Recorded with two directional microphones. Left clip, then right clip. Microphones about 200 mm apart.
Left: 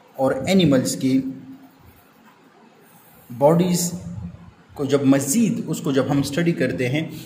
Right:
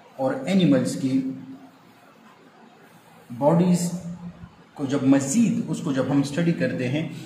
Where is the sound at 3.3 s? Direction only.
55° left (ahead or behind).